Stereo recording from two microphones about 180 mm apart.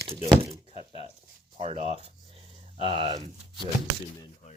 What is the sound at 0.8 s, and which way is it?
Speech, 35° right (ahead or behind).